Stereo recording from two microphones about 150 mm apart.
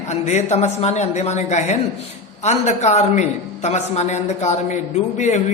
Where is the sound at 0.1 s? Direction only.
50° left (ahead or behind).